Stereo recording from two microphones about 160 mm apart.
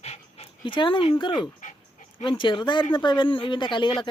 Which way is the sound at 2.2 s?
30° left (ahead or behind).